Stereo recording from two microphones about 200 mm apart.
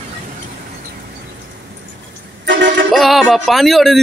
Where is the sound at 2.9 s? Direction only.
Centre (ahead or behind).